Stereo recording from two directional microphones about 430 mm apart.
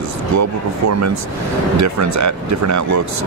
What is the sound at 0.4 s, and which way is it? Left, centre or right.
Speech, right.